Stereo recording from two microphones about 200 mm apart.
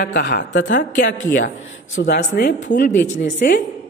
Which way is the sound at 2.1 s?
40° left (ahead or behind).